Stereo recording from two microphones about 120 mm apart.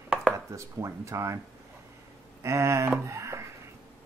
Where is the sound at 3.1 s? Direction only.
25° right (ahead or behind).